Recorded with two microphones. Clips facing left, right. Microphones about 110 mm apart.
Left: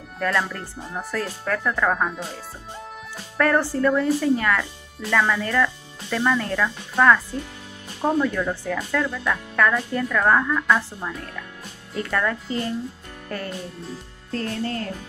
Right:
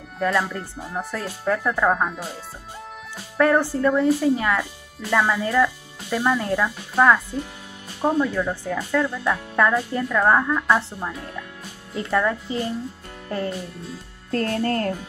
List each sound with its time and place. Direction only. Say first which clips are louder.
0.2 s speech: right 2 dB; 10° right (ahead or behind)
3.3 s speech: right 2 dB; 15° right (ahead or behind)
14.3 s speech: right 4 dB; 50° right (ahead or behind)